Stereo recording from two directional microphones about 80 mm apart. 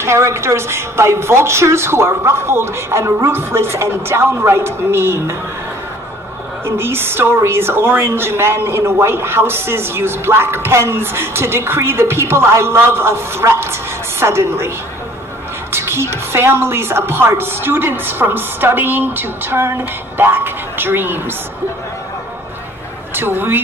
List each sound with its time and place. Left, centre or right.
0.0 s a woman's voice: right
6.6 s a woman's voice: right
15.7 s a woman's voice: right
23.1 s a woman's voice: right